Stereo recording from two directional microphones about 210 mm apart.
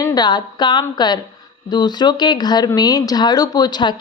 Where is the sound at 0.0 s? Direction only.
20° left (ahead or behind).